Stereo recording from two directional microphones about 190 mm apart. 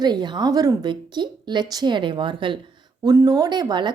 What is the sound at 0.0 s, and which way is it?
Speech, 25° right (ahead or behind).